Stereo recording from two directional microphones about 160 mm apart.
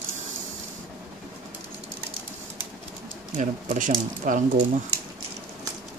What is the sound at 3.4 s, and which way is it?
Speech, 55° right (ahead or behind).